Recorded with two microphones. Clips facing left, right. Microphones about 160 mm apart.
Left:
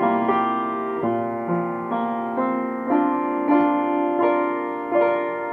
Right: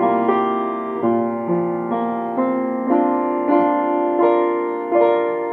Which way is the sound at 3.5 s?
50° right (ahead or behind).